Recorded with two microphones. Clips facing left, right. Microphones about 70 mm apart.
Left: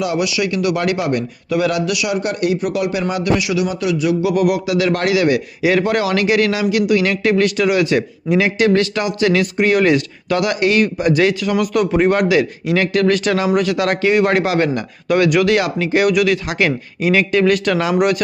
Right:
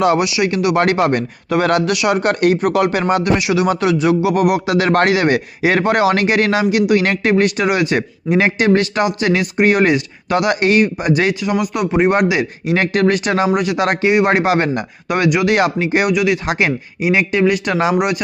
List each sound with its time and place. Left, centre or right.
0.2 s speech: right
0.8 s a man's voice: right
2.3 s speech: right
2.7 s speech: right
3.2 s speech: right
4.6 s a man's voice: right
17.9 s speech: centre